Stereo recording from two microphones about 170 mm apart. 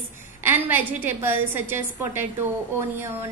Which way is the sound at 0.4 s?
15° right (ahead or behind).